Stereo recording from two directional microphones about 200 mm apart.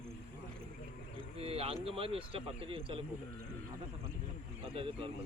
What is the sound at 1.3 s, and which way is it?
Speech, 30° right (ahead or behind).